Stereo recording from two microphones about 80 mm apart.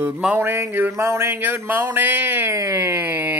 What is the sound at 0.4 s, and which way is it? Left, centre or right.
Speech, right.